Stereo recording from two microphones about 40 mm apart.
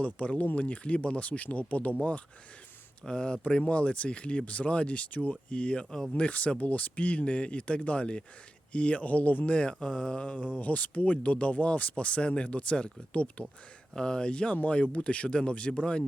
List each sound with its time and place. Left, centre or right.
0.0 s speech: left
3.1 s speech: left
10.2 s speech: left